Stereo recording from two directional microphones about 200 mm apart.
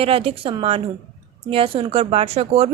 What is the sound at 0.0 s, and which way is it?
Speech, 30° right (ahead or behind).